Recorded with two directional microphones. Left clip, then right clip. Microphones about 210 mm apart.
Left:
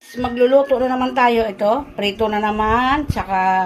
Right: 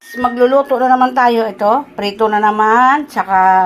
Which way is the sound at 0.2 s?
10° right (ahead or behind).